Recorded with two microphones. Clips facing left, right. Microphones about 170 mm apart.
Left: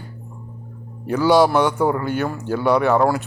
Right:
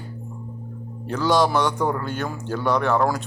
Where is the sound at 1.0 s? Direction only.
10° left (ahead or behind).